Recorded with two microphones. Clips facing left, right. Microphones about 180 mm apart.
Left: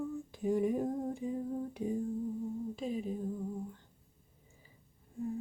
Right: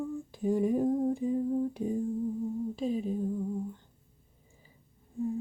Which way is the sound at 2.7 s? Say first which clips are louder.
Right 7 dB; 30° right (ahead or behind).